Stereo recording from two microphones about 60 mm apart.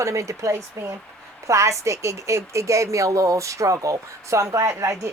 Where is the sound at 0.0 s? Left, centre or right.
Right.